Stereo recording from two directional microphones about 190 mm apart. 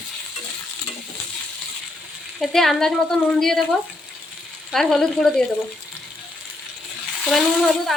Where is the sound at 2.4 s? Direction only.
Centre (ahead or behind).